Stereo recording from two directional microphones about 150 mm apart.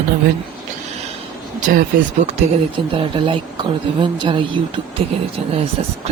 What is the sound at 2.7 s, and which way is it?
A woman's voice, 35° right (ahead or behind).